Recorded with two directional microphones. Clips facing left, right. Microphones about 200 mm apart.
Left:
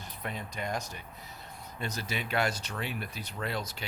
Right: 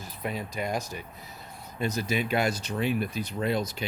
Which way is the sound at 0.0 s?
10° right (ahead or behind).